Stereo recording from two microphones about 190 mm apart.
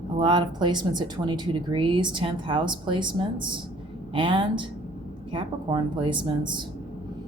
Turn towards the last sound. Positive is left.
turn(degrees=-25)  # may be behind; listen again after turning